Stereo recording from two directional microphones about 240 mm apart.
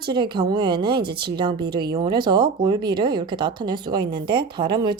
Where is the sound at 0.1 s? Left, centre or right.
Centre.